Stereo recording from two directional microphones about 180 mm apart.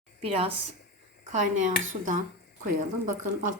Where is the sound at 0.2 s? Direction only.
30° right (ahead or behind).